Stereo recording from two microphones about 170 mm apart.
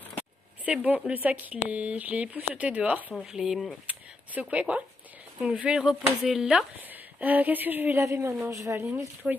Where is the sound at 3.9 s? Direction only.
10° right (ahead or behind).